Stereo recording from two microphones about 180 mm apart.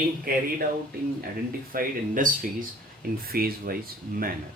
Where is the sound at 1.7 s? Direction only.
50° right (ahead or behind).